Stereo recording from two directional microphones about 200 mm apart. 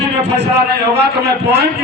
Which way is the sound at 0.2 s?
60° right (ahead or behind).